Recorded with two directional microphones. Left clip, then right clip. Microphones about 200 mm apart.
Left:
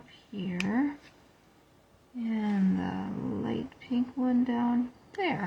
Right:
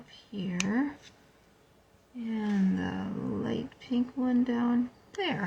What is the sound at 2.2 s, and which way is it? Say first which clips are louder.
Speech: left 1 dB; 10° left (ahead or behind).